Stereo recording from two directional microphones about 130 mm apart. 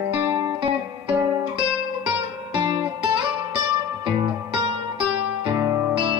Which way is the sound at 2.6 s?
40° right (ahead or behind).